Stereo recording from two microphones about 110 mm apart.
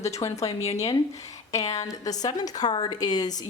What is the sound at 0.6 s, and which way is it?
Speech, 75° left (ahead or behind).